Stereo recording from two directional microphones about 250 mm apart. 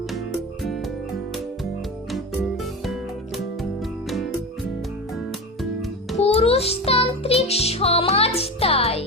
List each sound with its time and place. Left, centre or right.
2.8 s music: centre
6.1 s music: left